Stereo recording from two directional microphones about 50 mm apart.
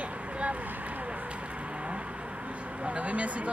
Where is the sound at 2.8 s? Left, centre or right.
Right.